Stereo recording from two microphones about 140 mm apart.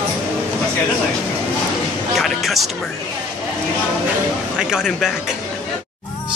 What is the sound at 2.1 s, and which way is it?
Music, centre (ahead or behind).